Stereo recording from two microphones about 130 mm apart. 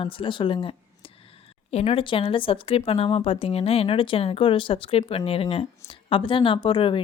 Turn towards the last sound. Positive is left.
turn(degrees=45)  # may be behind; listen again after turning